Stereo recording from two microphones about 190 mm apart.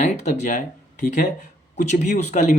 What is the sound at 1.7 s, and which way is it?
Speech, 40° left (ahead or behind).